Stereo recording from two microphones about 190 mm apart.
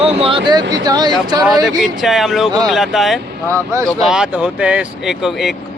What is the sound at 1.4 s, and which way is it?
Speech, centre (ahead or behind).